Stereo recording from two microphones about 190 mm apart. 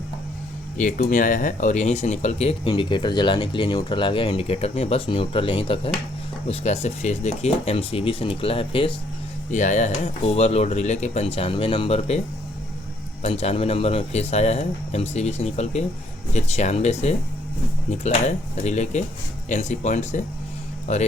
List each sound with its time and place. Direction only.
0.8 s speech: 40° left (ahead or behind)
9.5 s speech: 40° left (ahead or behind)
13.2 s speech: 35° left (ahead or behind)